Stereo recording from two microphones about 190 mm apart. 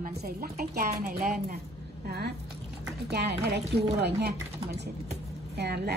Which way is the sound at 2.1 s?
60° right (ahead or behind).